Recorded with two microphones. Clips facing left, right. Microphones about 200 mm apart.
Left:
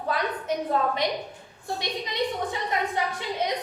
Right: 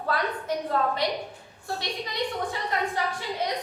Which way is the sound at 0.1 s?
20° left (ahead or behind).